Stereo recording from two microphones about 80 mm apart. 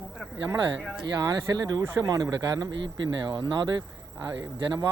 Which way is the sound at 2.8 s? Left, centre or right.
Right.